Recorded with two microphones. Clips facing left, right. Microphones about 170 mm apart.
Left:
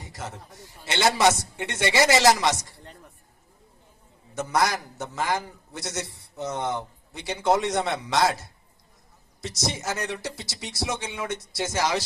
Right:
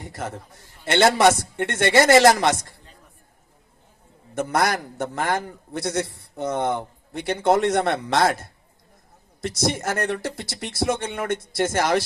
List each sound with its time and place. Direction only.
0.0 s a man's voice: 55° right (ahead or behind)
4.4 s a man's voice: 60° right (ahead or behind)